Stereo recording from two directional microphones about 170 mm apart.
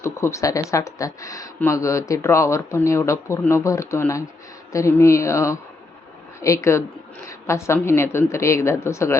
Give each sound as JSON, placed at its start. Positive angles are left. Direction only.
{"t": 0.0, "sound": "speech", "side_deg": 15}